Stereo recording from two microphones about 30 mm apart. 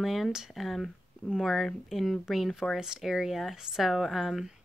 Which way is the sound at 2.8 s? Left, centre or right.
Centre.